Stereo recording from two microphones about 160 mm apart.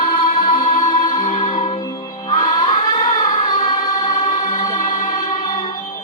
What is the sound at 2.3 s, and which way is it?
Music, 25° left (ahead or behind).